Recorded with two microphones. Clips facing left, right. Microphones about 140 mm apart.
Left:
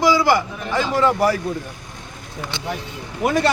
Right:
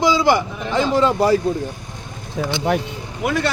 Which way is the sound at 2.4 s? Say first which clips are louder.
Right 8 dB; 90° right.